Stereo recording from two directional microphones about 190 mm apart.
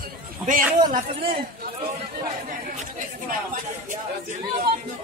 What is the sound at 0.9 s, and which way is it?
Speech, 50° right (ahead or behind).